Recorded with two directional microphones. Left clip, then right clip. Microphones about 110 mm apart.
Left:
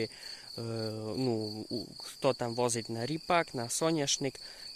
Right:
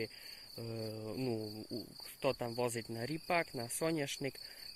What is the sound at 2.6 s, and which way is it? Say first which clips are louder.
Cricket: left 6 dB; 15° left (ahead or behind).